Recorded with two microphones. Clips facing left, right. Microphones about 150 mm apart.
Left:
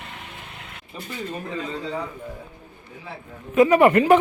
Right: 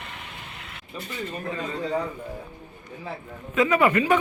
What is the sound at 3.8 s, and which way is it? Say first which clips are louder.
Speech: left 5 dB; 55° left (ahead or behind).